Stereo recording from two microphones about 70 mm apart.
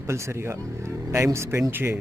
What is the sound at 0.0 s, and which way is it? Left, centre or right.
Speech, right.